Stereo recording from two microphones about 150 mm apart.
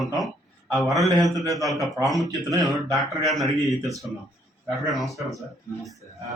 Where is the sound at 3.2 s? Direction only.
Centre (ahead or behind).